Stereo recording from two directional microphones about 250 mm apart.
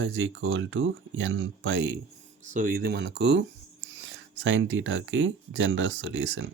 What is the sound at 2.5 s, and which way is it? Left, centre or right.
Speech, right.